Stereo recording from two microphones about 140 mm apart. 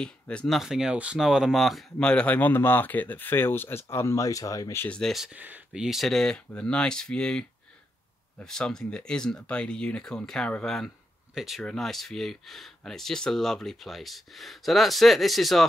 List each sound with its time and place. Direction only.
0.0 s speech: 5° left (ahead or behind); by 4.8 s 25° left (ahead or behind)
4.8 s speech: 5° left (ahead or behind)